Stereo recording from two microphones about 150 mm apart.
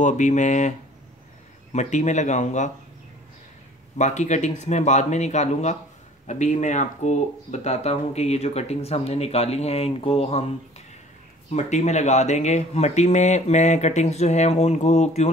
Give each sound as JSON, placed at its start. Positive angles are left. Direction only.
{"t": 0.0, "sound": "speech", "side_deg": 55}
{"t": 4.0, "sound": "speech", "side_deg": 50}
{"t": 11.5, "sound": "speech", "side_deg": 50}